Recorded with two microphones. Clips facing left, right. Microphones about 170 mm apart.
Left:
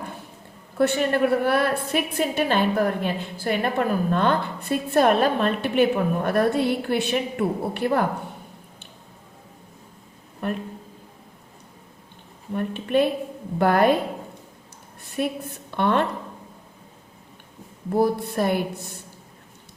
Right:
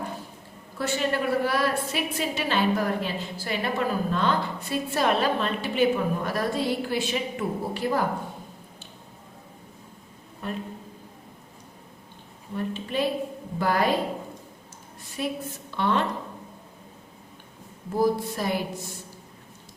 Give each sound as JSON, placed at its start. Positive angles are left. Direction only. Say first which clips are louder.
{"t": 0.8, "sound": "a woman's voice", "louder": "left 6 dB", "side_deg": 55}
{"t": 10.4, "sound": "a woman's voice", "louder": "left 5 dB", "side_deg": 60}
{"t": 12.5, "sound": "a woman's voice", "louder": "left 6 dB", "side_deg": 55}
{"t": 15.1, "sound": "a woman's voice", "louder": "left 4 dB", "side_deg": 55}
{"t": 17.9, "sound": "a woman's voice", "louder": "left 3 dB", "side_deg": 60}